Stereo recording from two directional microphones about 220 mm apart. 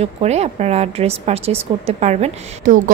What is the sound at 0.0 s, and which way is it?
A woman's voice, 30° right (ahead or behind).